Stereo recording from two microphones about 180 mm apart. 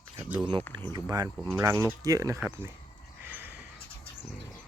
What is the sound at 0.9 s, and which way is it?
Speech, 20° right (ahead or behind).